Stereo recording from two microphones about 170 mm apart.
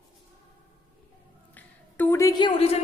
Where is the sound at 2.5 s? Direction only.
35° left (ahead or behind).